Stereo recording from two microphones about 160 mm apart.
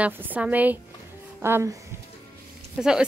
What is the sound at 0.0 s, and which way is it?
A woman's voice, 10° right (ahead or behind).